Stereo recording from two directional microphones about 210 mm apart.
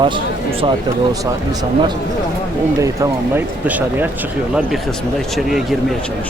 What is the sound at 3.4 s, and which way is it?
Speech, 10° right (ahead or behind).